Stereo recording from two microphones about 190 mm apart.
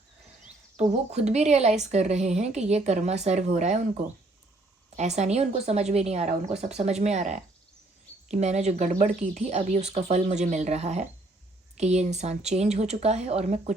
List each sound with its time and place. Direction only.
0.8 s speech: 35° right (ahead or behind)